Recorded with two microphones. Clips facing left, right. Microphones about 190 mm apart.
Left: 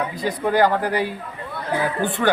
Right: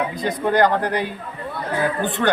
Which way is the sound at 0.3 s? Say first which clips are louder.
Even; 5° left (ahead or behind).